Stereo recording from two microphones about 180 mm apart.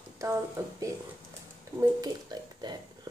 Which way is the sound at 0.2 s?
15° right (ahead or behind).